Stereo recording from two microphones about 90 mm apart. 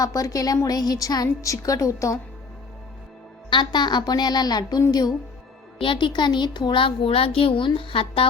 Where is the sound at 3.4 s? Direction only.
55° left (ahead or behind).